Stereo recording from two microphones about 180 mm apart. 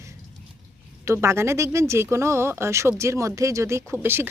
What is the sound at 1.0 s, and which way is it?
Speech, 15° right (ahead or behind).